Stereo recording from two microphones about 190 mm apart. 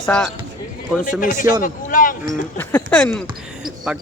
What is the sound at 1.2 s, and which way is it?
Speech, 45° left (ahead or behind).